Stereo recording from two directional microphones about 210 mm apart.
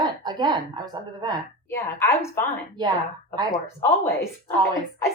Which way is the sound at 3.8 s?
10° left (ahead or behind).